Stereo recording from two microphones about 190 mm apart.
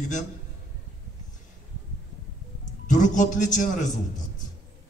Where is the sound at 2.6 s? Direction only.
40° left (ahead or behind).